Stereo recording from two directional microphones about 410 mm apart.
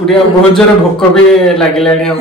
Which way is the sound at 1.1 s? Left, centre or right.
Centre.